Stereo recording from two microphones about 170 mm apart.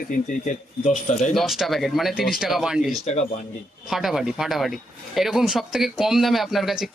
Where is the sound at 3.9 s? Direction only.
Centre (ahead or behind).